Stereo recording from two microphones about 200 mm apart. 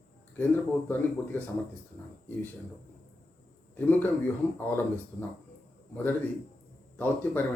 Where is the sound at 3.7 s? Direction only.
10° left (ahead or behind).